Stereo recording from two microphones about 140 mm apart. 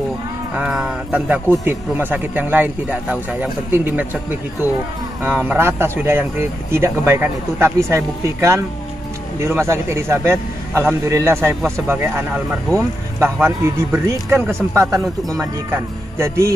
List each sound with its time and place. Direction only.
0.6 s a man's voice: 5° right (ahead or behind); by 16.5 s 20° right (ahead or behind)